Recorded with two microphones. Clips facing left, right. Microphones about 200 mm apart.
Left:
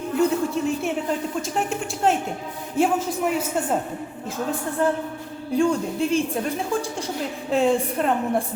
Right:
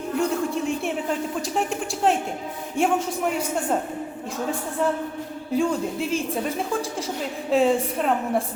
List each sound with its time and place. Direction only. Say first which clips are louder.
0.2 s a sound: left 3 dB; centre (ahead or behind)
1.4 s a woman's voice: even; centre (ahead or behind)
5.5 s a woman's voice: left 2 dB; centre (ahead or behind)
7.5 s a woman's voice: even; centre (ahead or behind)